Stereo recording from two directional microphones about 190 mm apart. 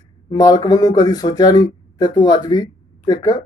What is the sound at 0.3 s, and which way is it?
Speech, 20° left (ahead or behind).